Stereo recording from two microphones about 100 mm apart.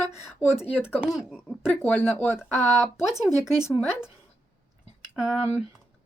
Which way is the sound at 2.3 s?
5° right (ahead or behind).